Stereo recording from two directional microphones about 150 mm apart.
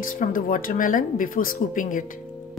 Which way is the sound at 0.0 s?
65° left (ahead or behind).